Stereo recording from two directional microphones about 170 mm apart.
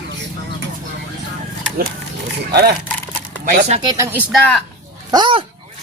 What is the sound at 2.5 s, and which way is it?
Speech, 70° right (ahead or behind).